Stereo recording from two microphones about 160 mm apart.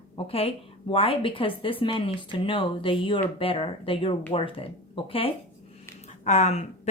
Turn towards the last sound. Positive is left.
turn(degrees=45)  # may be behind; listen again after turning